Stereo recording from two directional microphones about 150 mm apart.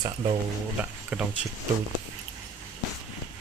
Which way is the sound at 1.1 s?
10° right (ahead or behind).